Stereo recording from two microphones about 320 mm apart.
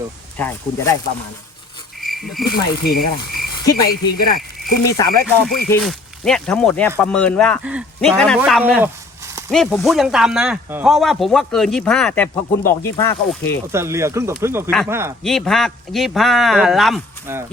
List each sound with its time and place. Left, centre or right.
0.3 s speech: centre
2.0 s insect: centre
2.5 s speech: left
4.2 s speech: left
4.8 s speech: centre
13.7 s speech: centre